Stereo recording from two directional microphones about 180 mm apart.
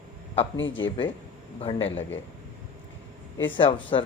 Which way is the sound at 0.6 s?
90° left.